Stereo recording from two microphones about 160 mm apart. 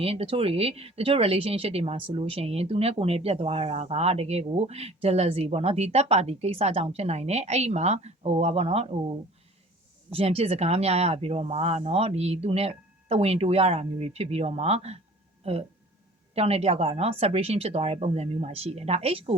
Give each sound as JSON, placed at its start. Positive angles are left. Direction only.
{"t": 0.0, "sound": "speech", "side_deg": -35}
{"t": 16.3, "sound": "speech", "side_deg": -40}